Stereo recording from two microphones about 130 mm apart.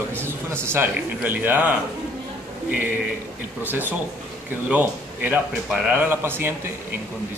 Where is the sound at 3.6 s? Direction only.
15° right (ahead or behind).